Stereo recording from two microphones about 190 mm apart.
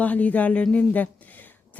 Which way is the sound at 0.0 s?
10° left (ahead or behind).